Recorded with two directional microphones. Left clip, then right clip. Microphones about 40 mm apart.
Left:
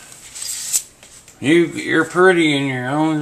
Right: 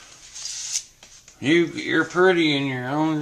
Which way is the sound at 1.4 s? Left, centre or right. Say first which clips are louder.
Left 5 dB; centre.